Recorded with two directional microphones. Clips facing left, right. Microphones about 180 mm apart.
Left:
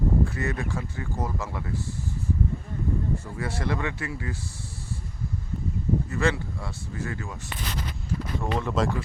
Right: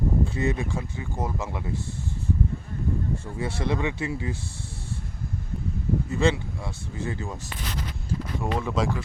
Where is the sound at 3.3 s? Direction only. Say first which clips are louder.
Right 5 dB; 20° right (ahead or behind).